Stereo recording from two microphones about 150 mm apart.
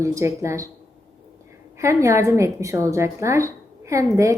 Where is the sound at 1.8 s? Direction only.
20° right (ahead or behind).